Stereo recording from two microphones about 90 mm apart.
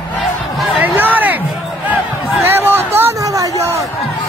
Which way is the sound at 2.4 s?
25° right (ahead or behind).